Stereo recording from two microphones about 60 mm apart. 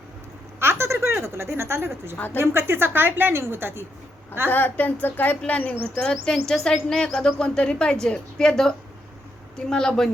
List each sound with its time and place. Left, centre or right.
0.6 s a sound: right
1.2 s a woman's voice: right
2.1 s speech: left
2.4 s a woman's voice: right
4.5 s speech: left
5.5 s a woman's voice: left
6.3 s a woman's voice: centre